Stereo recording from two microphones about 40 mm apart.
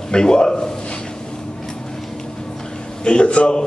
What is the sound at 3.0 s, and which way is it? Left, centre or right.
Speech, left.